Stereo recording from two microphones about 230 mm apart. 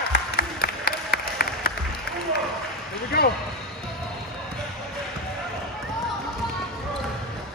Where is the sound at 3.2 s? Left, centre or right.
Left.